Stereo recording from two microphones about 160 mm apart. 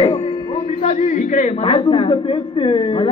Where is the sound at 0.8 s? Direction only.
50° left (ahead or behind).